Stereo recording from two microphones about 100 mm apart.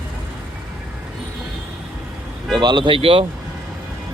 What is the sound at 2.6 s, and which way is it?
Speech, 50° right (ahead or behind).